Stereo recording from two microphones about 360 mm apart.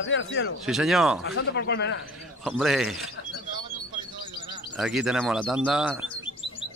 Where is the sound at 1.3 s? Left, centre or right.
Left.